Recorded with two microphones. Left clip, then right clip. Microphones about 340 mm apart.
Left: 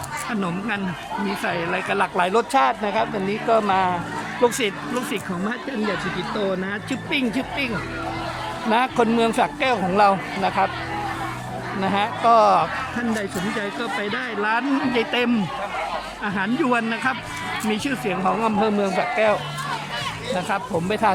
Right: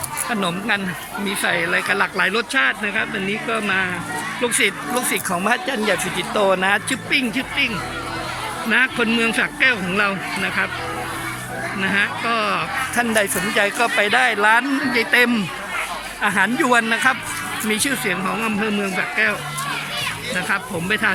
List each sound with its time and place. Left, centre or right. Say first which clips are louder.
0.3 s speech: right 7 dB; centre
6.7 s speech: right 9 dB; centre
7.1 s speech: right 3 dB; centre
8.7 s speech: right 1 dB; centre
11.8 s speech: right 1 dB; centre
13.6 s speech: right 11 dB; centre
20.5 s speech: right 3 dB; centre